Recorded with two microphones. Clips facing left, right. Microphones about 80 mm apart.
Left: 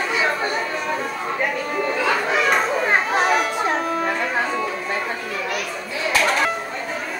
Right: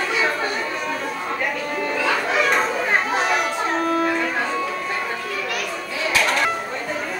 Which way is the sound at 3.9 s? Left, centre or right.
Centre.